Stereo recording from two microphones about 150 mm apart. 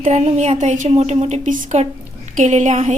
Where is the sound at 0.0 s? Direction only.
45° right (ahead or behind).